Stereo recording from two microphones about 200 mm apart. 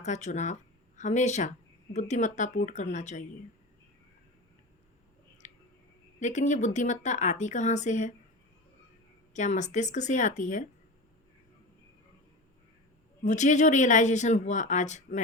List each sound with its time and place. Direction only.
0.0 s speech: 35° left (ahead or behind)
5.4 s a sound: 35° left (ahead or behind)
6.1 s a woman's voice: 35° left (ahead or behind)
9.3 s a woman's voice: 35° left (ahead or behind)
13.2 s a woman's voice: 35° left (ahead or behind)